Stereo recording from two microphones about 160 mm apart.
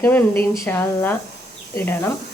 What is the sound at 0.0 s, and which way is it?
A woman's voice, 10° left (ahead or behind).